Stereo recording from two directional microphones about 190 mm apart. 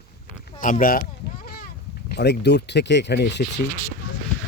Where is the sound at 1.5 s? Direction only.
50° left (ahead or behind).